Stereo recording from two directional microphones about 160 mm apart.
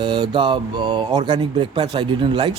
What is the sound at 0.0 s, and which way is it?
A man's voice, 30° right (ahead or behind).